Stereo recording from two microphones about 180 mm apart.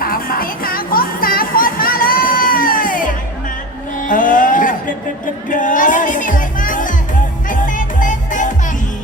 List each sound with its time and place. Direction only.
0.0 s music: 55° left (ahead or behind)
4.0 s a sound: 50° left (ahead or behind)
5.5 s music: 45° left (ahead or behind)